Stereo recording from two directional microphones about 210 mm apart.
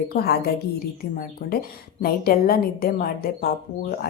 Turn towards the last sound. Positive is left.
turn(degrees=45)  # may be behind; listen again after turning